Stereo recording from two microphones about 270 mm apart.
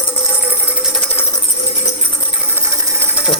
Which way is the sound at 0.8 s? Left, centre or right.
Centre.